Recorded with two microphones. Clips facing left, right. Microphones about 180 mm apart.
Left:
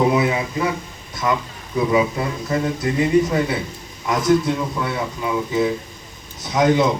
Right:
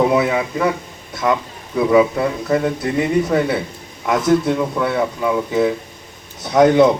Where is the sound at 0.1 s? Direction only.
60° right (ahead or behind).